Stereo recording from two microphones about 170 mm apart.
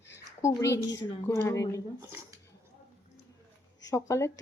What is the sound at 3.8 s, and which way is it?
Speech, 15° left (ahead or behind).